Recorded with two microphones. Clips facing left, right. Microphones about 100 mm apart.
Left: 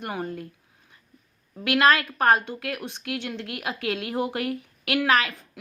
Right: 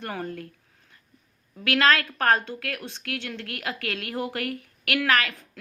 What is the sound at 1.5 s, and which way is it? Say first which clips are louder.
A woman's voice: left 2 dB; 15° left (ahead or behind).